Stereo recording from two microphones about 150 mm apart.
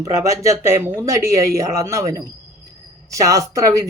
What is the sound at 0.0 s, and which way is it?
Speech, 20° right (ahead or behind).